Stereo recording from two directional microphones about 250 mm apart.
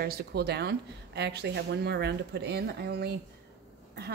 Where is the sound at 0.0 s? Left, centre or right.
Right.